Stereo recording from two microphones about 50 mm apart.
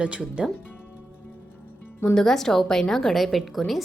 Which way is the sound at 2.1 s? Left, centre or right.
Centre.